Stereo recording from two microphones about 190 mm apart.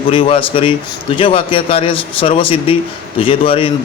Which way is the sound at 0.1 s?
30° left (ahead or behind).